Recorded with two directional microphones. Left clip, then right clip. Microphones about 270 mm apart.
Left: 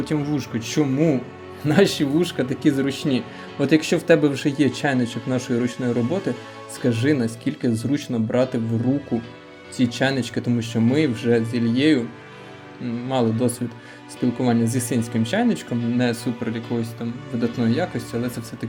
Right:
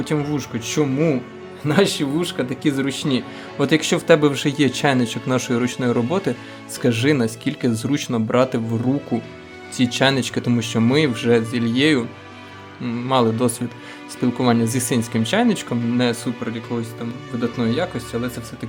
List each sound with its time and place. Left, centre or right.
0.0 s speech: centre
9.7 s speech: centre